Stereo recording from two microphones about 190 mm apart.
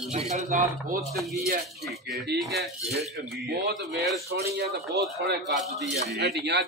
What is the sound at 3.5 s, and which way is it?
Speech, 60° right (ahead or behind).